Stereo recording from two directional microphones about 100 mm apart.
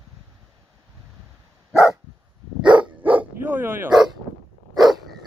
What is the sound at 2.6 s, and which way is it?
Dog, 50° right (ahead or behind).